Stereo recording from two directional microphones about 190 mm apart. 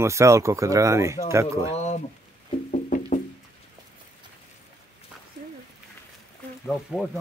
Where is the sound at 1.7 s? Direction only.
35° left (ahead or behind).